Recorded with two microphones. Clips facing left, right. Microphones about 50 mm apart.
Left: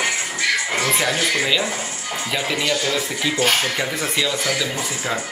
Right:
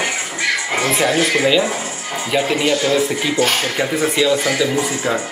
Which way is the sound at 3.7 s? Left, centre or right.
Centre.